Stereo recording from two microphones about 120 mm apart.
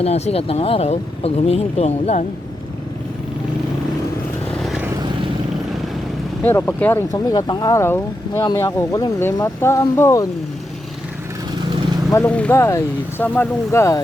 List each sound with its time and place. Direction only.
0.0 s speech: 60° left (ahead or behind)
6.4 s speech: 15° left (ahead or behind)
7.1 s speech: 35° left (ahead or behind)
12.2 s speech: 10° left (ahead or behind)